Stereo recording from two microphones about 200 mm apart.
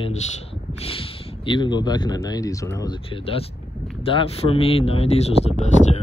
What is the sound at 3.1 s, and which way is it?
Speech, 25° left (ahead or behind).